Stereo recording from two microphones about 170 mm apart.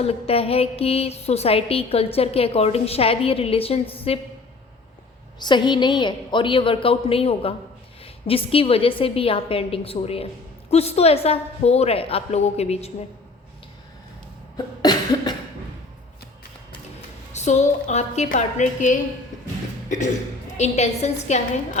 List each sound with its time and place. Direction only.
0.0 s a woman's voice: 35° left (ahead or behind)
5.4 s a woman's voice: 25° left (ahead or behind)
14.5 s cough: 25° left (ahead or behind)
17.3 s a woman's voice: 45° left (ahead or behind)
20.6 s a woman's voice: 40° left (ahead or behind)